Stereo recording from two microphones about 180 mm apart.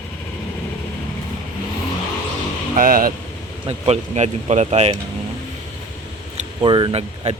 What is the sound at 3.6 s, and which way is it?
Speech, 35° right (ahead or behind).